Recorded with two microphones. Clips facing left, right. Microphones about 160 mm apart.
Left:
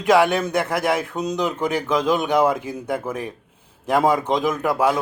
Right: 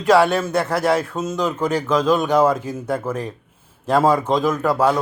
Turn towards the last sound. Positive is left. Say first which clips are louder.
# right 2 dB
turn(degrees=15)  # may be behind; listen again after turning